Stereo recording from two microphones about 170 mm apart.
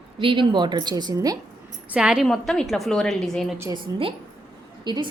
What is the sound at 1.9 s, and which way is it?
A woman's voice, 5° right (ahead or behind).